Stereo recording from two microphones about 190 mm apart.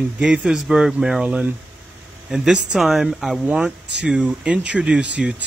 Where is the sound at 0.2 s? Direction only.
5° right (ahead or behind).